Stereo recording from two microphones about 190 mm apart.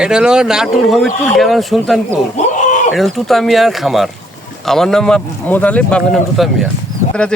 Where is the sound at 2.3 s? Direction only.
35° left (ahead or behind).